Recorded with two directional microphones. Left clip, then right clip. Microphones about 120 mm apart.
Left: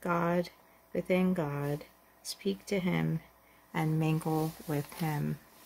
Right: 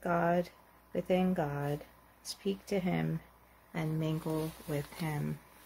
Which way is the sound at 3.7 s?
80° left.